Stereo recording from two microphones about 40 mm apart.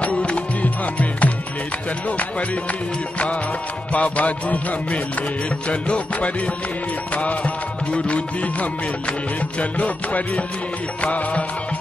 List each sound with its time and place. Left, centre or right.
0.0 s music: left
3.9 s music: left